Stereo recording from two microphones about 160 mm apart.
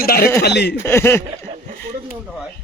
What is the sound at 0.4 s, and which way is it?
Speech, 90° left.